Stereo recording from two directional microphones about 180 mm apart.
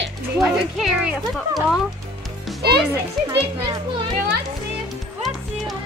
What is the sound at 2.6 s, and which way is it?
Music, 65° right (ahead or behind).